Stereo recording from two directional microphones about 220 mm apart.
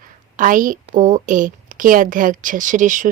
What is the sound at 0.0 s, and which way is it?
A woman's voice, 40° right (ahead or behind).